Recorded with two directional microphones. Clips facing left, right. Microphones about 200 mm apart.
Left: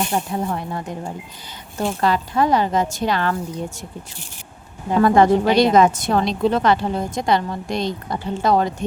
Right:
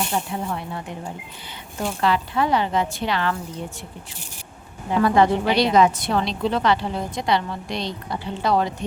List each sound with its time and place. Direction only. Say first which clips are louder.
0.1 s a woman's voice: left 3 dB; 40° left (ahead or behind)
2.0 s a woman's voice: left 2 dB; 40° left (ahead or behind)
4.9 s a woman's voice: left 4 dB; 45° left (ahead or behind)